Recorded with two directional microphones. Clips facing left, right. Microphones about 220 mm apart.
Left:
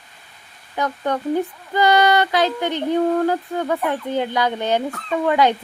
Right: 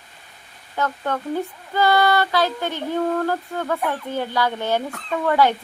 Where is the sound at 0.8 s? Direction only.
15° left (ahead or behind).